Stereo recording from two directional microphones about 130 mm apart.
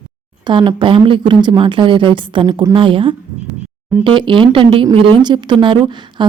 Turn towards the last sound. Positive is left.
turn(degrees=-35)  # may be behind; listen again after turning